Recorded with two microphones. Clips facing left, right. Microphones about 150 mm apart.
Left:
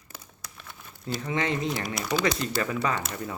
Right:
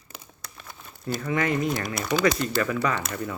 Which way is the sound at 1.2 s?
25° left (ahead or behind).